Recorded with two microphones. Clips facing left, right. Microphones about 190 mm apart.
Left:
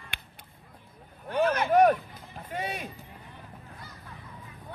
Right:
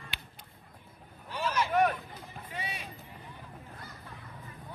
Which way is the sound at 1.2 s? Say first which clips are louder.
Left 7 dB; 55° left (ahead or behind).